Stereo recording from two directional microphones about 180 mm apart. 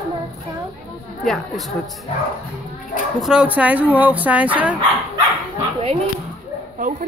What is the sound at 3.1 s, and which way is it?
Speech, 5° right (ahead or behind).